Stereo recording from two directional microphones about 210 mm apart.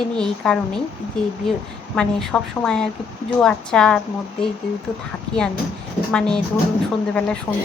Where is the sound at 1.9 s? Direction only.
Centre (ahead or behind).